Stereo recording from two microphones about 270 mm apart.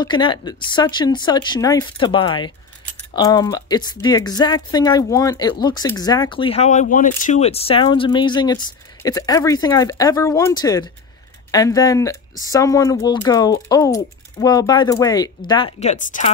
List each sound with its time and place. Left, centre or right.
0.0 s speech: centre